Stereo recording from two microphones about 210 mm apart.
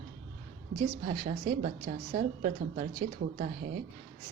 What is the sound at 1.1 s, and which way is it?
A woman's voice, 35° right (ahead or behind).